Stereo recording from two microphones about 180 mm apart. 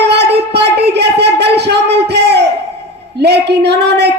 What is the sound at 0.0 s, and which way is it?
Music, 65° right (ahead or behind).